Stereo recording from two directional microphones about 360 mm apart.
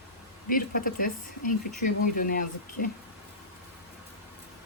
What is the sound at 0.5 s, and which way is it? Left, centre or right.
Speech, left.